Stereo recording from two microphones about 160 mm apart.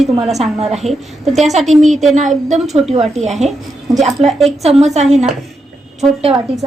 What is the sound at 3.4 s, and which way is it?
A woman's voice, centre (ahead or behind).